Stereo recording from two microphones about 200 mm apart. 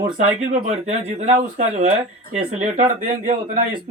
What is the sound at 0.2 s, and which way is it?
Speech, 35° right (ahead or behind).